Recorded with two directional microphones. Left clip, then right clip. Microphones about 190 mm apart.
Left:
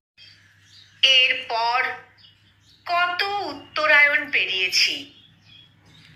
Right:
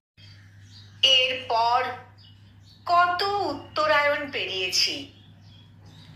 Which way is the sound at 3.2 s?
5° right (ahead or behind).